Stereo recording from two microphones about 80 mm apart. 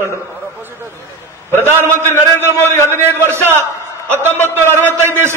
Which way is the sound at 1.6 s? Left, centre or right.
Right.